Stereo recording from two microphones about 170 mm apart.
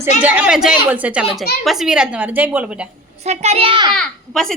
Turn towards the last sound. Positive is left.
turn(degrees=5)  # may be behind; listen again after turning